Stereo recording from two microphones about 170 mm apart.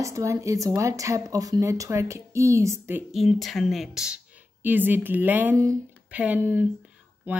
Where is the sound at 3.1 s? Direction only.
Centre (ahead or behind).